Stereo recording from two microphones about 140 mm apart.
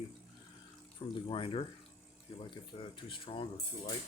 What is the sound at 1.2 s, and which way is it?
Speech, 40° left (ahead or behind).